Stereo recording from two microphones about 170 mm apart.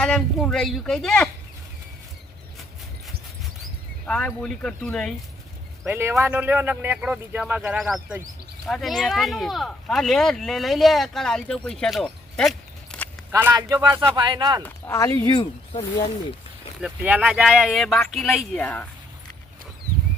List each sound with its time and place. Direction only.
0.0 s speech: 5° left (ahead or behind)
4.0 s speech: 5° left (ahead or behind)
5.8 s speech: 15° right (ahead or behind); by 13.1 s 5° left (ahead or behind)
13.3 s speech: 20° right (ahead or behind)
14.6 s speech: 15° left (ahead or behind)
16.8 s speech: 10° right (ahead or behind); by 18.9 s 10° left (ahead or behind)